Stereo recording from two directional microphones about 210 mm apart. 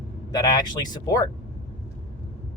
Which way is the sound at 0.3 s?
20° left (ahead or behind).